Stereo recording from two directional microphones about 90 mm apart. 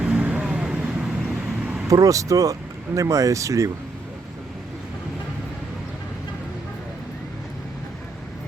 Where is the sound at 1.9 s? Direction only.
40° right (ahead or behind).